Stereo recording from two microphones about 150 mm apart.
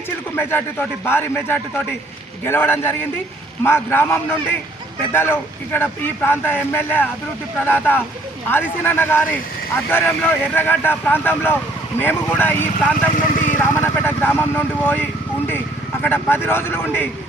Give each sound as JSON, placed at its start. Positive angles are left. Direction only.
{"t": 0.3, "sound": "speech", "side_deg": 15}
{"t": 13.2, "sound": "vehicle", "side_deg": 60}
{"t": 13.6, "sound": "speech", "side_deg": 15}